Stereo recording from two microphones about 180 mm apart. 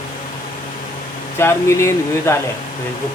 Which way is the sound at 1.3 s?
15° left (ahead or behind).